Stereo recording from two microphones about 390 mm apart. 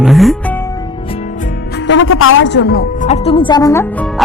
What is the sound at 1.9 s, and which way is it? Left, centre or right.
A woman's voice, left.